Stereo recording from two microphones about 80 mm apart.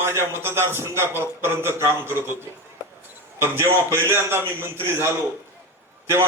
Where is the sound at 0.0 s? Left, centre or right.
Right.